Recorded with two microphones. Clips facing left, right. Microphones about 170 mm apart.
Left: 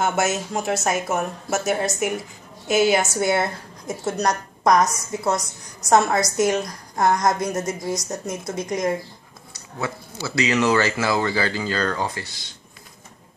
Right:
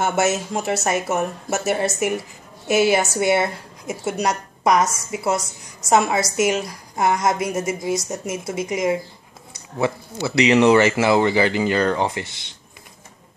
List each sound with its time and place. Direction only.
0.0 s a woman's voice: 5° right (ahead or behind)
9.8 s speech: 25° right (ahead or behind)